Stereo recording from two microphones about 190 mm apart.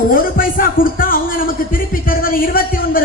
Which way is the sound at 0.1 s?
45° left (ahead or behind).